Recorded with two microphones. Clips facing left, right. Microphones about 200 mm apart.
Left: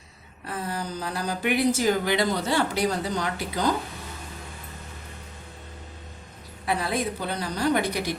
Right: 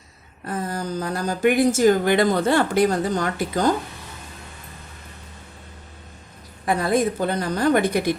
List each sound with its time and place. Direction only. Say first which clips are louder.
0.4 s speech: right 4 dB; 45° right (ahead or behind)
6.7 s speech: right 6 dB; 45° right (ahead or behind)